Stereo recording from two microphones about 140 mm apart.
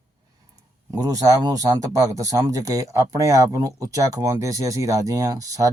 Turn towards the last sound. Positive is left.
turn(degrees=-25)  # may be behind; listen again after turning